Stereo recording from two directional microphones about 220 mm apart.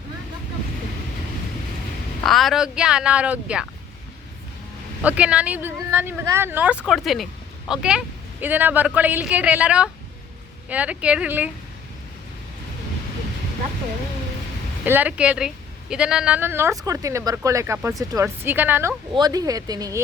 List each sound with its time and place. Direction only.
2.2 s speech: centre (ahead or behind)
5.0 s a woman's voice: 5° right (ahead or behind)
14.8 s a woman's voice: 5° right (ahead or behind)